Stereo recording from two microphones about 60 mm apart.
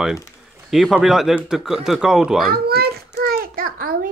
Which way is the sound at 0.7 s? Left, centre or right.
Centre.